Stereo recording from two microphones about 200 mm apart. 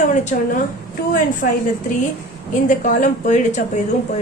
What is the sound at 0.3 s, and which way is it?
A woman's voice, 45° left (ahead or behind).